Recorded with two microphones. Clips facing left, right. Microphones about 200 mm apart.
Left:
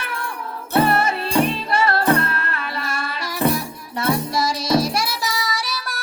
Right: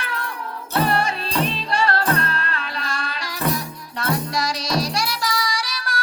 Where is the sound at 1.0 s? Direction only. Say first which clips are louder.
Left 4 dB; 25° left (ahead or behind).